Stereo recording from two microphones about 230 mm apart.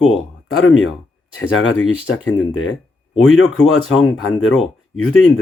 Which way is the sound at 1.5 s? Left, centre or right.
Left.